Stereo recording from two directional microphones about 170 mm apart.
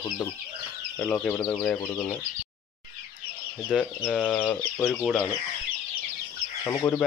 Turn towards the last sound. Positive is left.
turn(degrees=15)  # may be behind; listen again after turning